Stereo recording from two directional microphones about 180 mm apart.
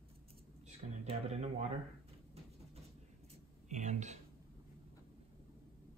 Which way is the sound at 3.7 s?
40° right (ahead or behind).